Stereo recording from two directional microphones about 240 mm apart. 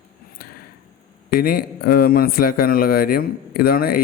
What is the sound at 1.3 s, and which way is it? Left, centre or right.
A man's voice, left.